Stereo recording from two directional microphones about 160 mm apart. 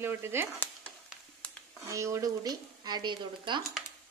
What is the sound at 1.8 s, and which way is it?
Speech, 20° right (ahead or behind).